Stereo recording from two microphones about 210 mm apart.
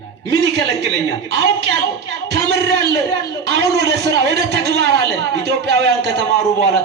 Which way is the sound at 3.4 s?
55° right (ahead or behind).